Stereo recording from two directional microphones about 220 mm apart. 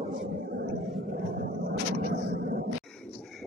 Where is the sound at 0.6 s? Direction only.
45° right (ahead or behind).